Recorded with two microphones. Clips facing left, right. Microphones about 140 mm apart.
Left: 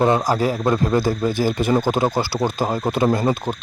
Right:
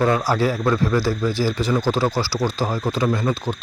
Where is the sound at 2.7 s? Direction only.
20° left (ahead or behind).